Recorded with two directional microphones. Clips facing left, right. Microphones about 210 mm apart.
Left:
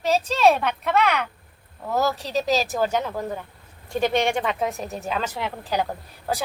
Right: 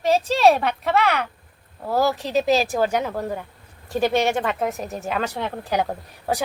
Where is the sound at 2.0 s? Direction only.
15° right (ahead or behind).